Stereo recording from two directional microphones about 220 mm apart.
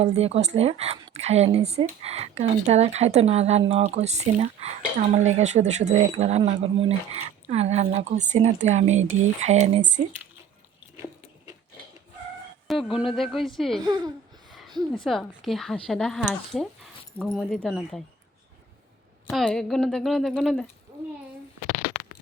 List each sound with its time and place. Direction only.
0.0 s speech: 25° right (ahead or behind)
12.6 s speech: centre (ahead or behind)
13.8 s speech: 15° right (ahead or behind)
14.9 s speech: centre (ahead or behind)
19.3 s speech: centre (ahead or behind)